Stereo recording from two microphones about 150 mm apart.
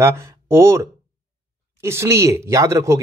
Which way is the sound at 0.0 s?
20° right (ahead or behind).